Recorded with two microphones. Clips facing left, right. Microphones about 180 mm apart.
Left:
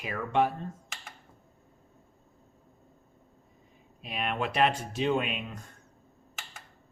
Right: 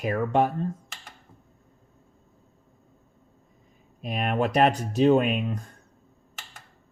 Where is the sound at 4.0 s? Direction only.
45° right (ahead or behind).